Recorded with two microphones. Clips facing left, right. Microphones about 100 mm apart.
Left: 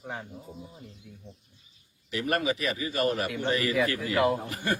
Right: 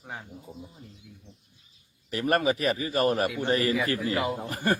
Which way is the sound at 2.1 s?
40° right (ahead or behind).